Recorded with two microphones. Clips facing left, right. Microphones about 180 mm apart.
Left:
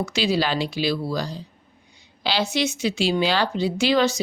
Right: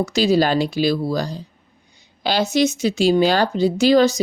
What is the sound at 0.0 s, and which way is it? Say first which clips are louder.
A woman's voice: right 6 dB; 40° right (ahead or behind).